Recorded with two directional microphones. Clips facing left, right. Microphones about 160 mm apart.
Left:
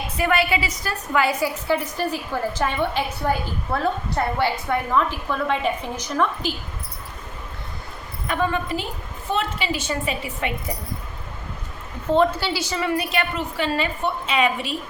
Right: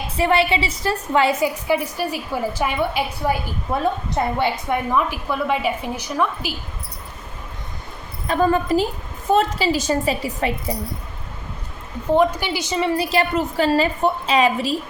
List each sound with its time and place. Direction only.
0.2 s a woman's voice: 25° right (ahead or behind)
1.6 s a woman's voice: 10° right (ahead or behind)
8.3 s a woman's voice: 40° right (ahead or behind)
12.1 s a woman's voice: 15° right (ahead or behind); by 14.8 s 35° right (ahead or behind)